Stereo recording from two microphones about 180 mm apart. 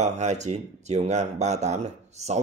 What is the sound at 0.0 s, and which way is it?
Speech, 40° right (ahead or behind).